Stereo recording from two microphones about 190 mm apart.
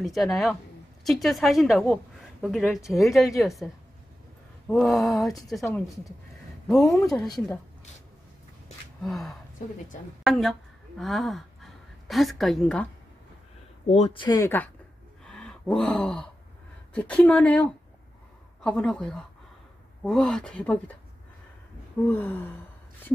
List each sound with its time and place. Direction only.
0.0 s a woman's voice: centre (ahead or behind)
6.8 s a woman's voice: 15° left (ahead or behind)
7.1 s a woman's voice: centre (ahead or behind)
9.0 s a woman's voice: centre (ahead or behind)
13.8 s speech: 35° left (ahead or behind); by 14.7 s 15° left (ahead or behind)
15.2 s gasp: 5° left (ahead or behind)
16.9 s a woman's voice: 5° left (ahead or behind)
22.0 s a woman's voice: 10° left (ahead or behind)